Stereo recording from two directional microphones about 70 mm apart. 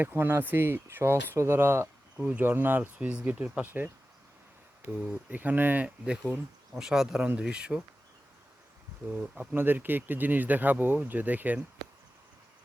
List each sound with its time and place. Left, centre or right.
0.0 s speech: right
2.2 s speech: right
5.3 s speech: right
6.7 s speech: centre
9.0 s speech: centre
9.6 s speech: right